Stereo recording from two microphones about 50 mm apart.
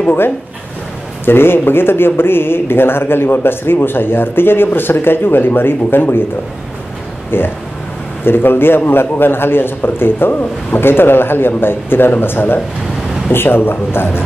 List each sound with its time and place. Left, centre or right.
1.2 s speech: left
7.2 s speech: left